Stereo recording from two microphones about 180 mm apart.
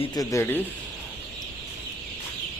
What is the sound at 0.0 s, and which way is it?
Speech, 20° left (ahead or behind).